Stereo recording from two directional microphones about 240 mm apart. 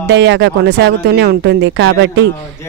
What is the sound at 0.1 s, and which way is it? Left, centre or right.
Speech, right.